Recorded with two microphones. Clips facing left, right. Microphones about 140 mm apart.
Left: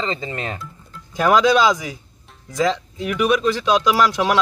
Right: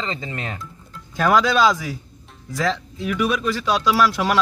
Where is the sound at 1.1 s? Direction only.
15° left (ahead or behind).